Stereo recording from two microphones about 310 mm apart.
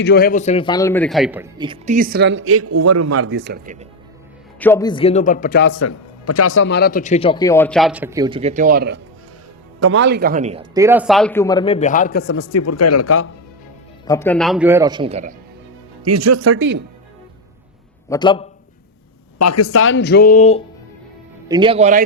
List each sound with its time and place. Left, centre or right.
0.0 s a man's voice: left; by 3.8 s right
4.6 s a man's voice: centre; by 5.7 s left
5.7 s speech: left
12.4 s speech: left
14.1 s speech: centre; by 15.4 s right
16.0 s speech: right
16.6 s speech: right
18.1 s speech: centre
19.4 s speech: left
21.4 s speech: centre